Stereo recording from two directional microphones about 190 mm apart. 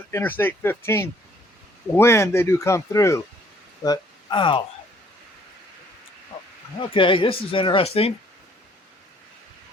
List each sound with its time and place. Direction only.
0.1 s speech: 10° left (ahead or behind)
6.7 s speech: 25° left (ahead or behind)